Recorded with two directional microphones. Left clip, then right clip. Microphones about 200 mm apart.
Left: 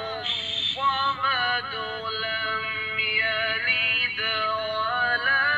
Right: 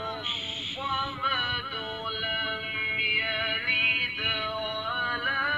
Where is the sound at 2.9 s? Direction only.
45° left (ahead or behind).